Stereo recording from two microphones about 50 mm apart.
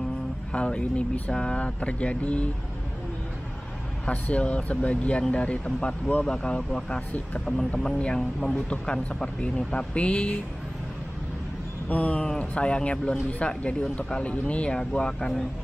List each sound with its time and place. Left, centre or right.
0.5 s speech: left
4.0 s speech: left; by 8.6 s centre
8.6 s speech: centre
11.9 s speech: left